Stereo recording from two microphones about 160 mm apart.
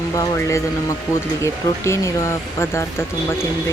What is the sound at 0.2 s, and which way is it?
Speech, 20° left (ahead or behind).